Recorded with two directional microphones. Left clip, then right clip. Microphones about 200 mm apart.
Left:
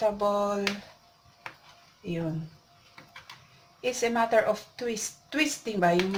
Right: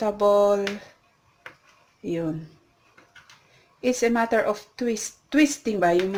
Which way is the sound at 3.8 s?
55° right (ahead or behind).